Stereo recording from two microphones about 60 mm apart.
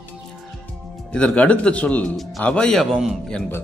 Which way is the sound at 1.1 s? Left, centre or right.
Left.